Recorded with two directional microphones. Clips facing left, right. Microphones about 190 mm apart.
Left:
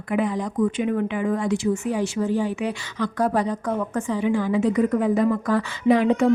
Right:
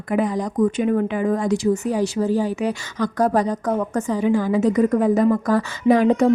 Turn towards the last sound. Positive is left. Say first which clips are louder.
# right 2 dB
turn(degrees=-40)  # may be behind; listen again after turning